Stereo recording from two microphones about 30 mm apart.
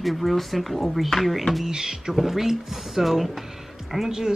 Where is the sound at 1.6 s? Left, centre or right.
Centre.